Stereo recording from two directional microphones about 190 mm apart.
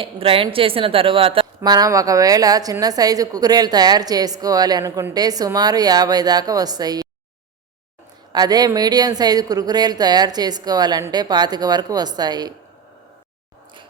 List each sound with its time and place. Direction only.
0.0 s a woman's voice: 30° right (ahead or behind)
8.3 s a woman's voice: 20° right (ahead or behind)